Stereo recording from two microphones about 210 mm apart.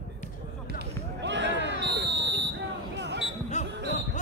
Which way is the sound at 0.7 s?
55° right (ahead or behind).